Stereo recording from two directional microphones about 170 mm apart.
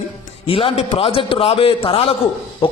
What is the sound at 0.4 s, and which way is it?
A man's voice, 35° left (ahead or behind).